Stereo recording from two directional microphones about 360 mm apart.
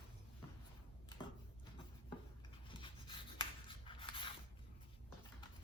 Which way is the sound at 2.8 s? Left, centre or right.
Centre.